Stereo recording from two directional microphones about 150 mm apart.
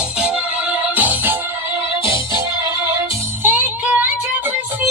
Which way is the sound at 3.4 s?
10° right (ahead or behind).